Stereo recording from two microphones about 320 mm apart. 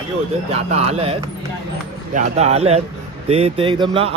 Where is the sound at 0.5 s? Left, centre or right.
Centre.